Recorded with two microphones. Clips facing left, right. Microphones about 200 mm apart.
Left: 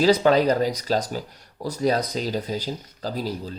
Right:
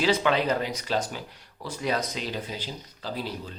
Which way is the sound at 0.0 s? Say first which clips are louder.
Left 6 dB; 40° left (ahead or behind).